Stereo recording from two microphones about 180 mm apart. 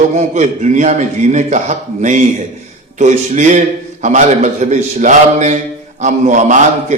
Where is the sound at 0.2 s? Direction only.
40° right (ahead or behind).